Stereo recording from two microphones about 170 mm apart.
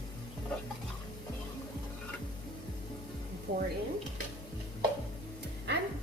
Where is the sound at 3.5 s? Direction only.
90° right.